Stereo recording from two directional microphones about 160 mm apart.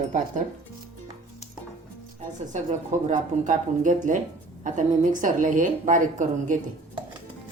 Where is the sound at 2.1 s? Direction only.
50° right (ahead or behind).